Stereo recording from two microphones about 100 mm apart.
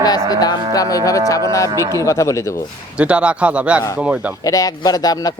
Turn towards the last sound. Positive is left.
turn(degrees=40)  # may be behind; listen again after turning